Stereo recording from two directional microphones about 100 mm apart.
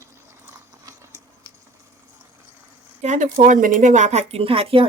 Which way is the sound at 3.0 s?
90° right.